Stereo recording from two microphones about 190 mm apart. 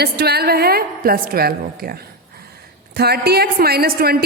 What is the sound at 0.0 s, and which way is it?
A woman's voice, 55° right (ahead or behind).